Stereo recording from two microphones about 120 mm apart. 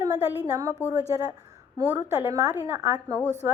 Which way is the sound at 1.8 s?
30° right (ahead or behind).